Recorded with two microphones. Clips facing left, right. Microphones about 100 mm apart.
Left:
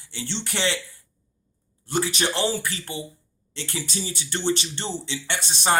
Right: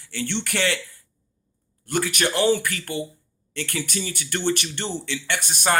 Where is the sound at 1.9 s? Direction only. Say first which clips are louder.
Right 1 dB; 25° left (ahead or behind).